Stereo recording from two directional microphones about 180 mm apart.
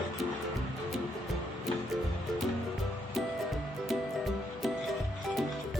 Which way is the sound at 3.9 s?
Centre (ahead or behind).